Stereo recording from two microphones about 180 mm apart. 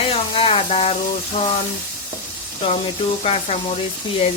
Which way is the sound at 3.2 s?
35° left (ahead or behind).